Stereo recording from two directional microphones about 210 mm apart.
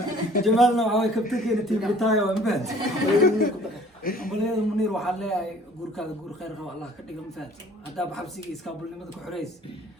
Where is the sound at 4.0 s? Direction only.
45° left (ahead or behind).